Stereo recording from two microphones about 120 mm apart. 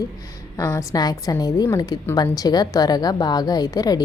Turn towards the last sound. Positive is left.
turn(degrees=35)  # may be behind; listen again after turning